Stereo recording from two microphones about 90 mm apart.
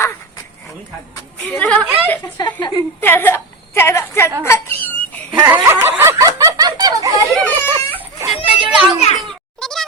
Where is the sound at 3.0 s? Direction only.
25° left (ahead or behind).